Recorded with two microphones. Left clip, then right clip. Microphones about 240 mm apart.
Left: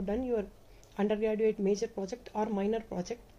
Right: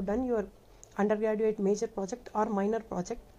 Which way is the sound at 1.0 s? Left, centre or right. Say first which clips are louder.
Right 1 dB; centre.